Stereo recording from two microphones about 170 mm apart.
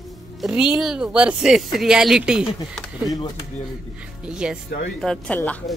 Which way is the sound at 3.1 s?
20° left (ahead or behind).